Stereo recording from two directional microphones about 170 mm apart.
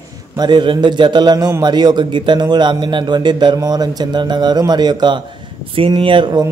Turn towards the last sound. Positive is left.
turn(degrees=-25)  # may be behind; listen again after turning